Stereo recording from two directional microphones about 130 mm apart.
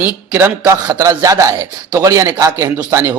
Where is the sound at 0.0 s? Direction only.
15° right (ahead or behind).